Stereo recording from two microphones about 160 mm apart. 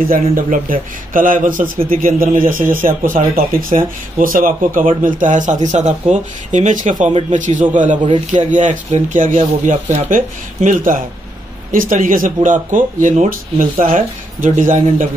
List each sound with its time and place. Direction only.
0.1 s speech: 60° right (ahead or behind)